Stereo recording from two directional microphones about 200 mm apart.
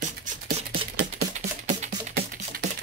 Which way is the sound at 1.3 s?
35° right (ahead or behind).